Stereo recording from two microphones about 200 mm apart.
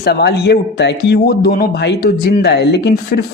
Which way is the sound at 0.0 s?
55° left (ahead or behind).